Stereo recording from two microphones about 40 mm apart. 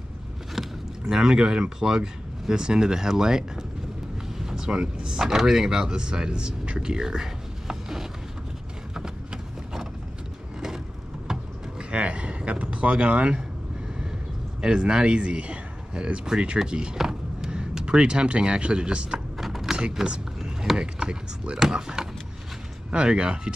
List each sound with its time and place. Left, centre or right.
0.6 s rowboat: centre
1.1 s speech: centre
4.3 s vehicle: centre
5.2 s speech: centre
8.9 s a sound: centre
11.9 s a sound: right
14.6 s speech: right
19.3 s mechanisms: centre
19.8 s speech: centre